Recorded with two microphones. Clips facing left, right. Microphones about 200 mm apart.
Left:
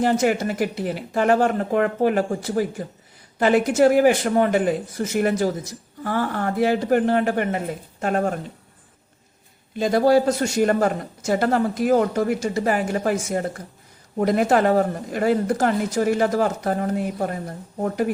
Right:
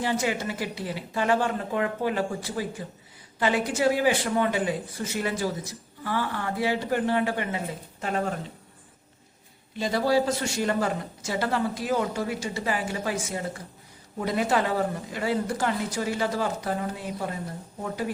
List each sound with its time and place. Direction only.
0.0 s a woman's voice: 50° left (ahead or behind)
9.7 s a woman's voice: 50° left (ahead or behind)